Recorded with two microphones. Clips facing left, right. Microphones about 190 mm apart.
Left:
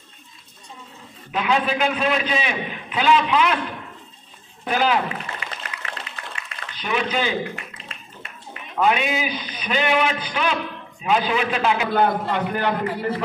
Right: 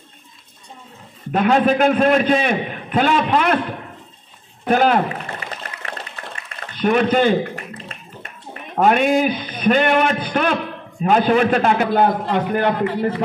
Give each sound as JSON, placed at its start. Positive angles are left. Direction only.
{"t": 1.3, "sound": "a man's voice", "side_deg": -50}
{"t": 4.6, "sound": "water", "side_deg": -50}